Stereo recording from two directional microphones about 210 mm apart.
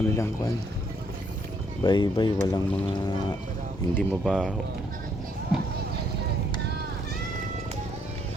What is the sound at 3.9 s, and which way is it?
Speech, centre (ahead or behind).